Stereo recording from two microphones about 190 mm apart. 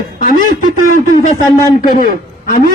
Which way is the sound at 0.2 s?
50° left (ahead or behind).